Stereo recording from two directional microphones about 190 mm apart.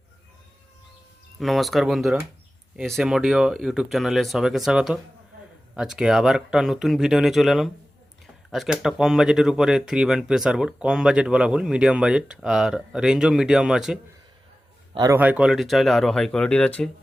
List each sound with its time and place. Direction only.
1.4 s speech: centre (ahead or behind)
14.9 s a man's voice: 20° right (ahead or behind)
15.2 s speech: 5° right (ahead or behind)